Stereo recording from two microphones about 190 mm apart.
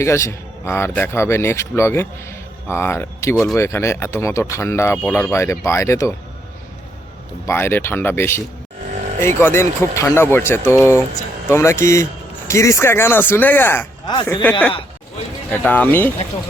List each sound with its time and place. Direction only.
0.0 s speech: 15° left (ahead or behind)
7.4 s speech: 10° left (ahead or behind)
14.0 s speech: 25° left (ahead or behind)
15.4 s speech: 5° left (ahead or behind)